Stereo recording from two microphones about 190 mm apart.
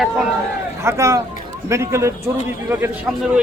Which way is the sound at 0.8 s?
15° right (ahead or behind).